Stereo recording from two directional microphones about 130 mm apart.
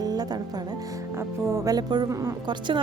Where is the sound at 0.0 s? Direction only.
30° right (ahead or behind).